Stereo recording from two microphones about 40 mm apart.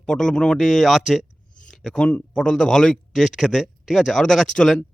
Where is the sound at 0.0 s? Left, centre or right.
Centre.